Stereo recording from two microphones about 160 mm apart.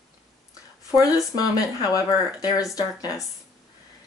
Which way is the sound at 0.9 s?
20° left (ahead or behind).